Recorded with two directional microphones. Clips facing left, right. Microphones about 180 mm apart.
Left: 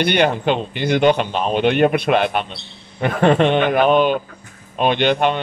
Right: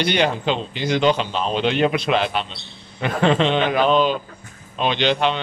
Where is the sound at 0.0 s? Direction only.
55° left (ahead or behind).